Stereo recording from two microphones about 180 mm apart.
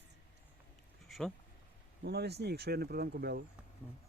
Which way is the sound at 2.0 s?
65° right (ahead or behind).